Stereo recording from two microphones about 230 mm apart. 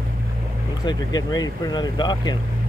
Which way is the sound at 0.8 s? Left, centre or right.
Centre.